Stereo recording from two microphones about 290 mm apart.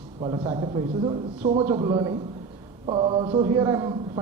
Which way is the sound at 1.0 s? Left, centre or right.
Centre.